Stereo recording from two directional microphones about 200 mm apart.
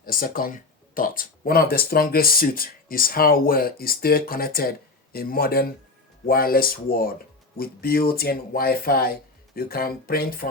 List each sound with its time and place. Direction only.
0.0 s speech: 45° left (ahead or behind)